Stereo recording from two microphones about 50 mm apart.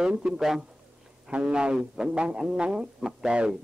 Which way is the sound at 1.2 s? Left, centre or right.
Centre.